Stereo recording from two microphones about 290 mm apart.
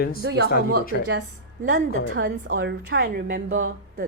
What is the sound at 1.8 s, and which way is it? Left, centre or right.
Speech, right.